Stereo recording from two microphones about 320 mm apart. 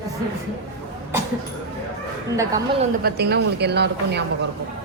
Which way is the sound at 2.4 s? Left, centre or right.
Centre.